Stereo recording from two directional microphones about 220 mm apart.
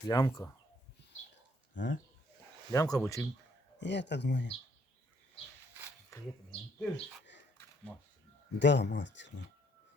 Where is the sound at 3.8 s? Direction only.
50° left (ahead or behind).